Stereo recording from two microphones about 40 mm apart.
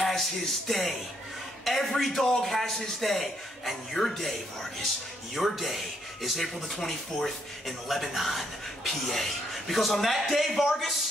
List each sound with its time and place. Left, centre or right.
0.0 s a man's voice: centre